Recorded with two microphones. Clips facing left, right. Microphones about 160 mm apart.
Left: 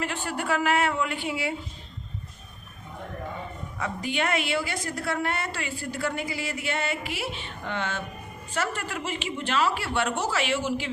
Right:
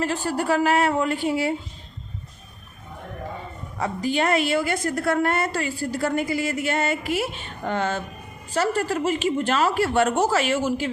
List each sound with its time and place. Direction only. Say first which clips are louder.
0.0 s speech: right 6 dB; 35° right (ahead or behind)
3.8 s a woman's voice: right 6 dB; 35° right (ahead or behind)